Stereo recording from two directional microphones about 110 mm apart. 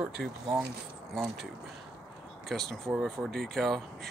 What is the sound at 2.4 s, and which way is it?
Speech, 5° left (ahead or behind).